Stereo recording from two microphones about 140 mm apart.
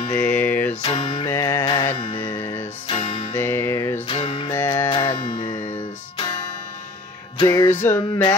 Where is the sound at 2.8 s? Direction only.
45° left (ahead or behind).